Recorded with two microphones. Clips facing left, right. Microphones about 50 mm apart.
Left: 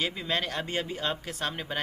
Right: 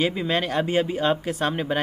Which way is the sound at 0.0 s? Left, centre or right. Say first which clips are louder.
Right 7 dB; centre.